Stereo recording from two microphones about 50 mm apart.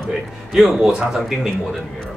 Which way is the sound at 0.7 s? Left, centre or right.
Centre.